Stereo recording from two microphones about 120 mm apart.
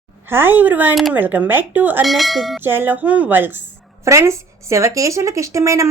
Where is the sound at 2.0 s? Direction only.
Centre (ahead or behind).